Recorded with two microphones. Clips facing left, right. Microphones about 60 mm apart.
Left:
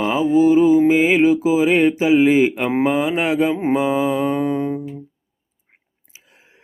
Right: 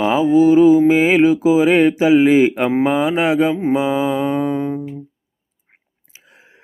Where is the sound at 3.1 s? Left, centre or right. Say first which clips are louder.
Right 3 dB; right.